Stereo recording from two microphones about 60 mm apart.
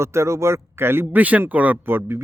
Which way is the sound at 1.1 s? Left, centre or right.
Right.